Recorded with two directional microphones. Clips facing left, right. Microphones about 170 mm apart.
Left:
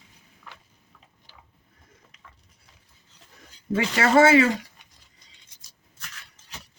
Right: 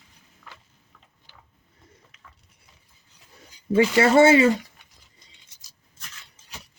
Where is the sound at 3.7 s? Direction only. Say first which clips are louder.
Right 3 dB; 25° right (ahead or behind).